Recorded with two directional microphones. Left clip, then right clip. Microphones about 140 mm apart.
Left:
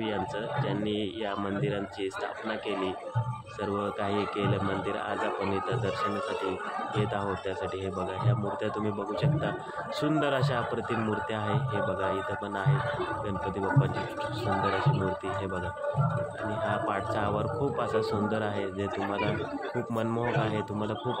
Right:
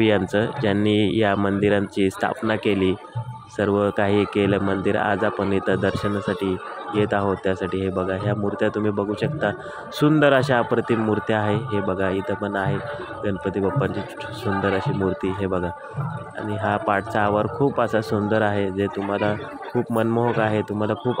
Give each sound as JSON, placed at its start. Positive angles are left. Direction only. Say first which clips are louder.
{"t": 0.0, "sound": "a man's voice", "louder": "right 12 dB", "side_deg": -60}
{"t": 15.2, "sound": "a man's voice", "louder": "right 8 dB", "side_deg": -50}
{"t": 16.6, "sound": "a man's voice", "louder": "right 9 dB", "side_deg": -50}
{"t": 19.8, "sound": "speech", "louder": "right 11 dB", "side_deg": -35}
{"t": 20.2, "sound": "a man's voice", "louder": "right 8 dB", "side_deg": -50}